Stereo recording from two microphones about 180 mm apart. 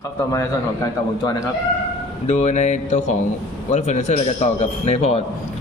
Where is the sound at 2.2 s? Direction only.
40° left (ahead or behind).